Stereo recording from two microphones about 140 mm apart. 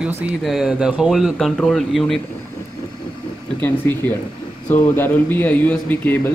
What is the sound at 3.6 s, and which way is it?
Speech, 15° left (ahead or behind).